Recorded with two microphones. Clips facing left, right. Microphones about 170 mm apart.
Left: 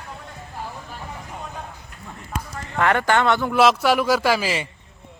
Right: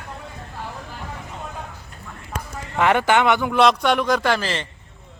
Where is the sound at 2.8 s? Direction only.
20° right (ahead or behind).